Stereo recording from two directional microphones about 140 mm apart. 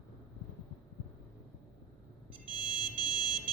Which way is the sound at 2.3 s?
35° left (ahead or behind).